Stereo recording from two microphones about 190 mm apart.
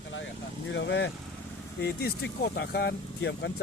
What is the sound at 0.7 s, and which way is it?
Speech, 65° left (ahead or behind).